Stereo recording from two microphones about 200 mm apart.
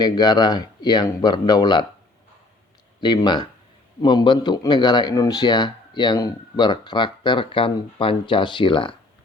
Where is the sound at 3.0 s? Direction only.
20° left (ahead or behind).